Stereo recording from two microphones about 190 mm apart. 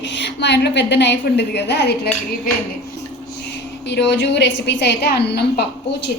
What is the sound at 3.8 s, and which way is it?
A woman's voice, 65° left (ahead or behind).